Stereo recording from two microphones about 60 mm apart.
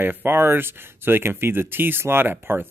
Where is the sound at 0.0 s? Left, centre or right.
Right.